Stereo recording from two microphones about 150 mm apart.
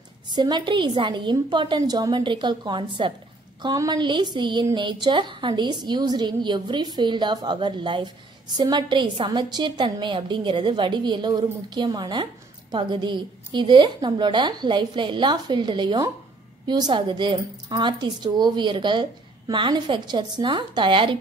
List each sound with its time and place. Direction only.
0.3 s a woman's voice: 30° right (ahead or behind)